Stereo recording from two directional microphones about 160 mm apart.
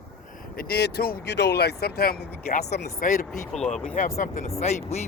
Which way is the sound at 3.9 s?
50° left (ahead or behind).